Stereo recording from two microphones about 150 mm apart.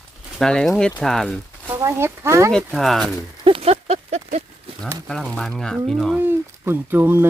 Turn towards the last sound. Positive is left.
turn(degrees=-15)  # may be behind; listen again after turning